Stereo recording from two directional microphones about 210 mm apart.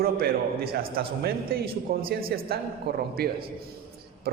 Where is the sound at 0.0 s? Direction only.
45° right (ahead or behind).